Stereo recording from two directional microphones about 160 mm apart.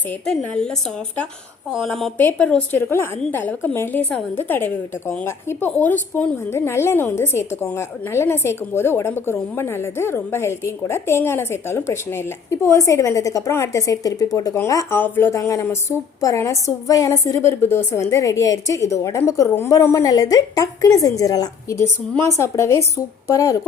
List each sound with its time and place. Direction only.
0.3 s a woman's voice: 5° left (ahead or behind)
1.7 s a woman's voice: centre (ahead or behind); by 23.6 s 20° left (ahead or behind)